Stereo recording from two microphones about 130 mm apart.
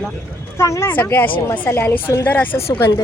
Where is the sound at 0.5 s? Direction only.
20° left (ahead or behind).